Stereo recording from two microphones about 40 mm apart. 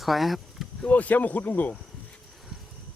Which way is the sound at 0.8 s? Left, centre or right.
Left.